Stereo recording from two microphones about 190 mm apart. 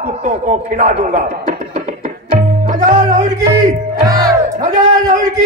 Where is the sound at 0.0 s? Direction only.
40° right (ahead or behind).